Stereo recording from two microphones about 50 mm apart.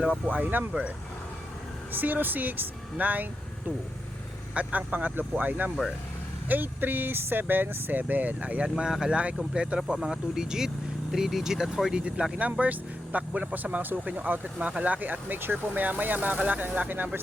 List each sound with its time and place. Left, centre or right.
0.7 s speech: right
4.5 s speech: right
8.8 s speech: centre; by 17.1 s right